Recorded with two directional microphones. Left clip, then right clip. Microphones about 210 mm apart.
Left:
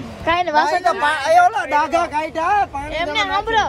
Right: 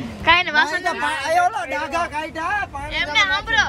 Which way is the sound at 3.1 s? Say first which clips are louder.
Right 1 dB; 25° left (ahead or behind).